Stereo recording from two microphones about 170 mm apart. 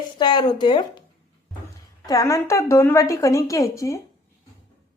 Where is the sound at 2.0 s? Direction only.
20° left (ahead or behind).